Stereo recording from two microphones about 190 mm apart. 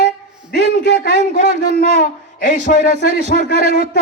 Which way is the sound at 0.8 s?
55° left (ahead or behind).